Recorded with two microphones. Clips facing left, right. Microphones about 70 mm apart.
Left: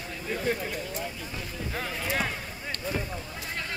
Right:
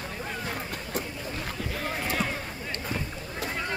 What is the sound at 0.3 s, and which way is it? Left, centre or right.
Speech, right.